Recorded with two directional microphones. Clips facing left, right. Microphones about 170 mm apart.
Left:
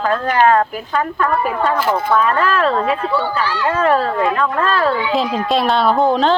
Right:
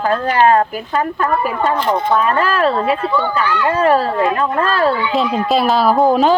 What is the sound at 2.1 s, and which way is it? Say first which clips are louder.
Speech: left 1 dB; 30° right (ahead or behind).